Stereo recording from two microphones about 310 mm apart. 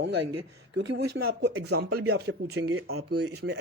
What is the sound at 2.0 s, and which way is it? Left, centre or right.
Speech, right.